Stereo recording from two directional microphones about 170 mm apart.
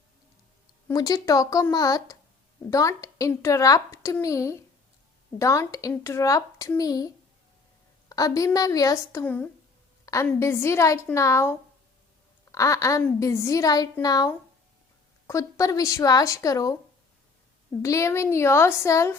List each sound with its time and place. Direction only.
0.9 s a woman's voice: 20° left (ahead or behind)
8.1 s a woman's voice: 20° left (ahead or behind)
9.2 s a woman's voice: 10° left (ahead or behind)
10.1 s a sound: 20° left (ahead or behind)
10.4 s a woman's voice: 15° left (ahead or behind)
17.8 s a woman's voice: 15° left (ahead or behind)